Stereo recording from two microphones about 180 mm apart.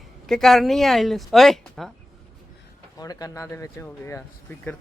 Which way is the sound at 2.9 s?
20° left (ahead or behind).